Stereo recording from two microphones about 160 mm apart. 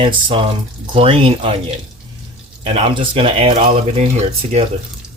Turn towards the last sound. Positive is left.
turn(degrees=-40)  # may be behind; listen again after turning